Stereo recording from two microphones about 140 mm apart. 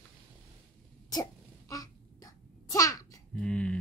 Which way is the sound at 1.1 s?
25° left (ahead or behind).